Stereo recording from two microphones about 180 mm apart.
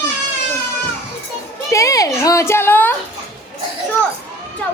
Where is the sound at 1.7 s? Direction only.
20° left (ahead or behind).